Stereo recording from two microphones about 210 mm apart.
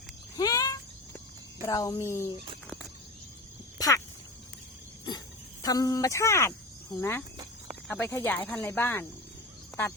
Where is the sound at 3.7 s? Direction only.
15° left (ahead or behind).